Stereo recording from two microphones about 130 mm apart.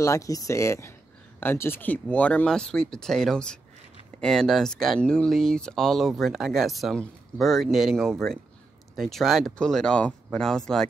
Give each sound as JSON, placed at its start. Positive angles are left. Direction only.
{"t": 0.0, "sound": "speech", "side_deg": 25}